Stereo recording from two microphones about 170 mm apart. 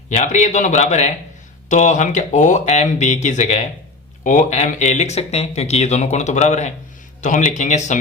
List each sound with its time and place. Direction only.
0.1 s speech: 45° left (ahead or behind)